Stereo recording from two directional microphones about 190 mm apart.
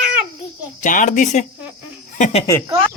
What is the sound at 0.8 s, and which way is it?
Speech, 40° left (ahead or behind).